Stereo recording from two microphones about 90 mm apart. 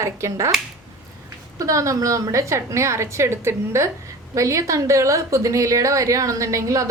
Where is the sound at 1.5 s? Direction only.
35° right (ahead or behind).